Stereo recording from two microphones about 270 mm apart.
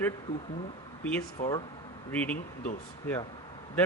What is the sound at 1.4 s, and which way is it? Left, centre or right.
Speech, left.